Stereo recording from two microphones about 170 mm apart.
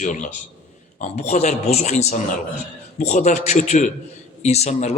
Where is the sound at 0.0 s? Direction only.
45° left (ahead or behind).